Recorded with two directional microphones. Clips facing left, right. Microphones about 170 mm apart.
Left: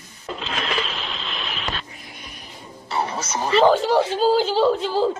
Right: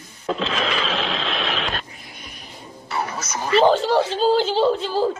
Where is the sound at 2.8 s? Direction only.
30° left (ahead or behind).